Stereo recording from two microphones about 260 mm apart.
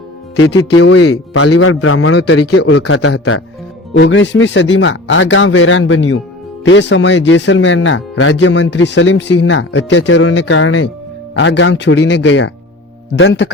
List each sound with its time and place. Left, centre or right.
0.8 s speech: left